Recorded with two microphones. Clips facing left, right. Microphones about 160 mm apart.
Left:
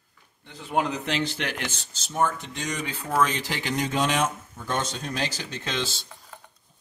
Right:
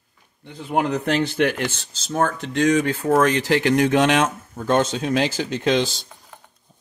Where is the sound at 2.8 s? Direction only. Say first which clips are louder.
Right 7 dB; 50° right (ahead or behind).